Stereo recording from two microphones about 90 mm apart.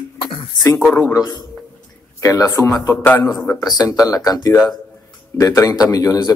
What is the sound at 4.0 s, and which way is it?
Speech, 45° left (ahead or behind).